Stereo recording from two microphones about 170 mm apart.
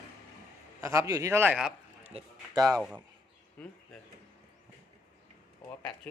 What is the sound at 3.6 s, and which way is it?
Speech, 5° left (ahead or behind).